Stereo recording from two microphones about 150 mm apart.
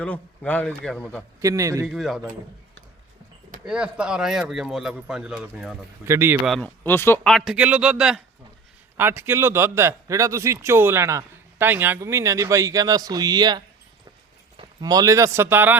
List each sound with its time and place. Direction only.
0.0 s a man's voice: 10° left (ahead or behind)
1.4 s a man's voice: 20° right (ahead or behind)
1.9 s speech: centre (ahead or behind)
3.7 s speech: 5° right (ahead or behind)
6.1 s speech: 15° right (ahead or behind)
6.4 s speech: centre (ahead or behind)
6.8 s a man's voice: 15° left (ahead or behind)
7.3 s speech: centre (ahead or behind)
9.0 s a man's voice: 15° right (ahead or behind)